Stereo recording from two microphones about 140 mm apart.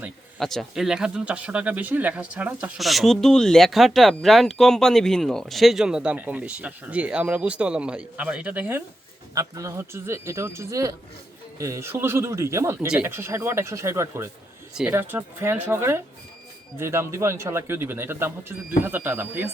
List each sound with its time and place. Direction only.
0.3 s speech: centre (ahead or behind)
9.3 s speech: 25° right (ahead or behind)